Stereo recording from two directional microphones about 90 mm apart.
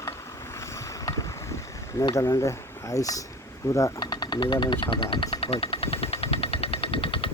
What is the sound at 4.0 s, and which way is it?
Music, 55° left (ahead or behind).